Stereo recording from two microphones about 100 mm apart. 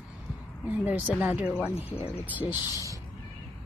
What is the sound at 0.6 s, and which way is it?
Speech, 15° right (ahead or behind).